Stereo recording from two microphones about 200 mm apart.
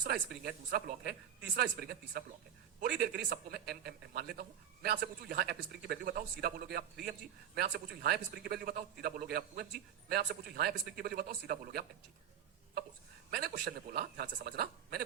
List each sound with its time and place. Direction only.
0.0 s speech: 50° right (ahead or behind)
13.3 s speech: 50° right (ahead or behind)